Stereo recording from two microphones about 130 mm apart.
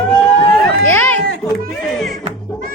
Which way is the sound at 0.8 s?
15° left (ahead or behind).